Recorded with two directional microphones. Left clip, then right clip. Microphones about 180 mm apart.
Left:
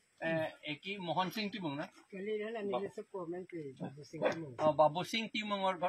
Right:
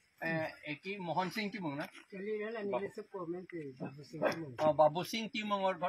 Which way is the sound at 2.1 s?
25° left (ahead or behind).